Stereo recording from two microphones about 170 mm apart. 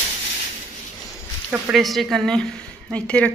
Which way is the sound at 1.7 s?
Centre (ahead or behind).